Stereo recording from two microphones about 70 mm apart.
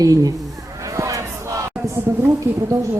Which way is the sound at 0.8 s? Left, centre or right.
Right.